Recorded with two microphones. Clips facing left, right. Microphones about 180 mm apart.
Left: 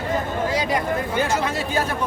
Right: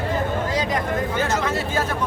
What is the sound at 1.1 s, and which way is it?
Speech, 15° left (ahead or behind).